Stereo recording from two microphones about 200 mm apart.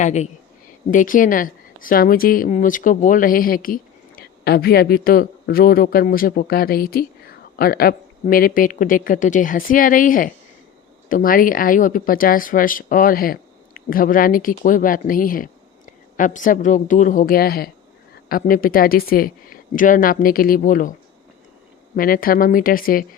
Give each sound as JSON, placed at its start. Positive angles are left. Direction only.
{"t": 0.0, "sound": "a woman's voice", "side_deg": 35}
{"t": 21.9, "sound": "a woman's voice", "side_deg": 45}